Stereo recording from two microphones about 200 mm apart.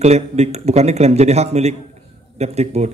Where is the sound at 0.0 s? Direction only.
35° right (ahead or behind).